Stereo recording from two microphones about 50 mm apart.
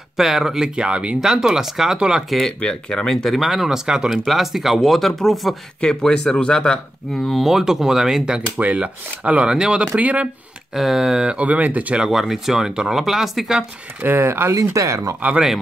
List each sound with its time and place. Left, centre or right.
0.2 s speech: centre
2.2 s speech: centre
2.6 s speech: centre
3.3 s speech: centre
5.8 s speech: centre
7.2 s speech: centre
8.5 s speech: right
9.9 s speech: right
10.7 s speech: centre
11.4 s speech: right
12.0 s speech: centre
14.0 s speech: right
14.5 s speech: right